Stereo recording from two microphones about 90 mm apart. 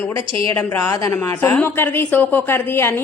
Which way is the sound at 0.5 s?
30° left (ahead or behind).